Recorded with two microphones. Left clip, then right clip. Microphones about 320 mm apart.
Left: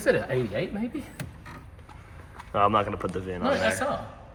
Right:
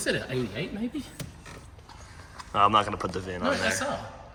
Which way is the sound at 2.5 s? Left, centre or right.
Centre.